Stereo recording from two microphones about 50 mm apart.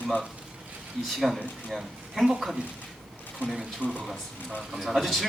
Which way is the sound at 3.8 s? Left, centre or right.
Left.